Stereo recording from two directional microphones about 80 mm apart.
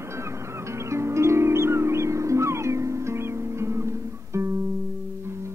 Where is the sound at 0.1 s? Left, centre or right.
Right.